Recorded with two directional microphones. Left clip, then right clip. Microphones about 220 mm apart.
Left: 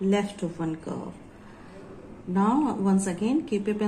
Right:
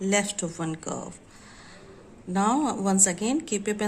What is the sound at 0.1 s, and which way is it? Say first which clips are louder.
Speech: right 4 dB; 50° right (ahead or behind).